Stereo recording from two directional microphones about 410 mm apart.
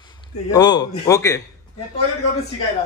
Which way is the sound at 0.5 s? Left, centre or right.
Centre.